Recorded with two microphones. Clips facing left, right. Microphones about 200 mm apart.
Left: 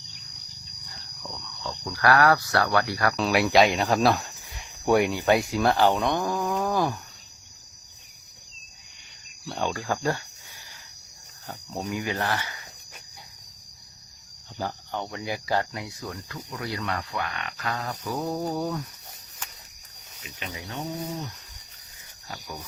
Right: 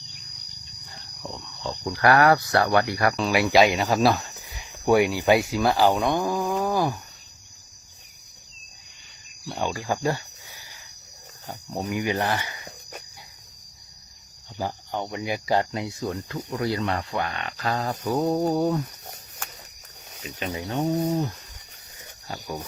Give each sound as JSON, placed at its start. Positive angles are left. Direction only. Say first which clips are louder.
{"t": 1.2, "sound": "speech", "louder": "right 4 dB", "side_deg": -20}
{"t": 3.2, "sound": "speech", "louder": "right 1 dB", "side_deg": 0}
{"t": 9.6, "sound": "speech", "louder": "right 1 dB", "side_deg": -15}
{"t": 11.4, "sound": "speech", "louder": "right 2 dB", "side_deg": -15}
{"t": 14.6, "sound": "speech", "louder": "right 2 dB", "side_deg": -15}
{"t": 20.2, "sound": "speech", "louder": "right 7 dB", "side_deg": -40}